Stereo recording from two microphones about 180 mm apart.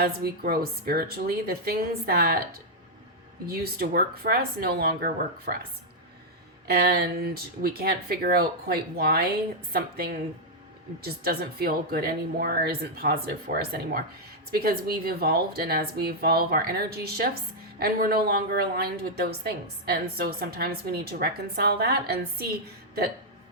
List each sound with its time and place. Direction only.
0.0 s a woman's voice: 60° right (ahead or behind)
6.7 s a woman's voice: 60° right (ahead or behind)
11.0 s a woman's voice: 60° right (ahead or behind)